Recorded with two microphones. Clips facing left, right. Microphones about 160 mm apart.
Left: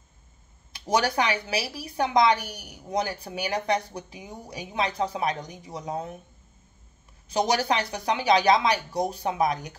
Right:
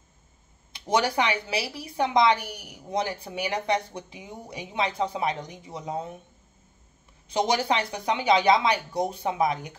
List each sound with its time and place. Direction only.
0.7 s a woman's voice: 25° right (ahead or behind)
7.2 s a woman's voice: 25° right (ahead or behind)